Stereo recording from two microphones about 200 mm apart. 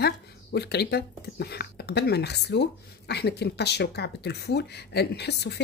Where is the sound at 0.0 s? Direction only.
55° left (ahead or behind).